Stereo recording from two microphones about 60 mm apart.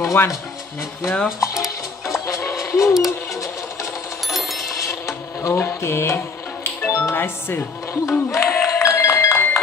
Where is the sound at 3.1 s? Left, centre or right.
Left.